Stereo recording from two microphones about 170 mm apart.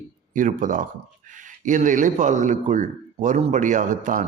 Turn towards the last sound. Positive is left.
turn(degrees=-50)  # may be behind; listen again after turning